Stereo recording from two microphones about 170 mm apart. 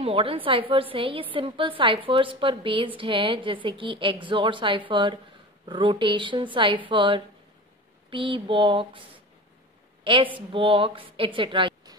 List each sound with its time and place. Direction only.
0.0 s a woman's voice: 35° right (ahead or behind)
10.0 s a woman's voice: 30° right (ahead or behind)